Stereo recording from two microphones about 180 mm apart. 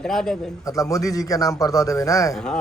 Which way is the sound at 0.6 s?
20° left (ahead or behind).